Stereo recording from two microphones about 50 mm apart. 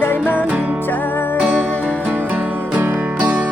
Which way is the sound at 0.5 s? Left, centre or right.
Right.